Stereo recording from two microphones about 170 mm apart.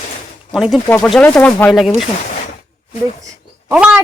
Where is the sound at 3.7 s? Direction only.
10° right (ahead or behind).